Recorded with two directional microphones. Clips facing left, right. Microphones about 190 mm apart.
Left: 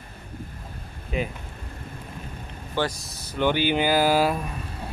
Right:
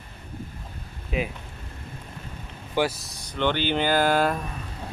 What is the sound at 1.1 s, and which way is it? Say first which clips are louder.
Speech: even; centre (ahead or behind).